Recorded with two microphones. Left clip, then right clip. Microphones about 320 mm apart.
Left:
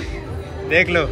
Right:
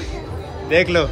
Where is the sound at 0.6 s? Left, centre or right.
Centre.